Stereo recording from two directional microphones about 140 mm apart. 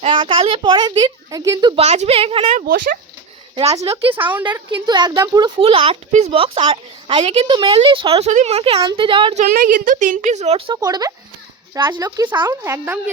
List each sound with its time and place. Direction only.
0.0 s speech: 35° right (ahead or behind)
1.7 s a woman's voice: 50° right (ahead or behind)
2.6 s speech: 85° right
3.6 s a woman's voice: 50° right (ahead or behind)
4.1 s a woman's voice: 15° right (ahead or behind)
4.7 s speech: 30° right (ahead or behind)
5.5 s speech: 40° right (ahead or behind)
6.1 s speech: 55° right (ahead or behind); by 9.3 s 35° right (ahead or behind)
9.3 s a woman's voice: 70° right (ahead or behind); by 10.8 s 50° right (ahead or behind)
10.8 s a woman's voice: 25° right (ahead or behind)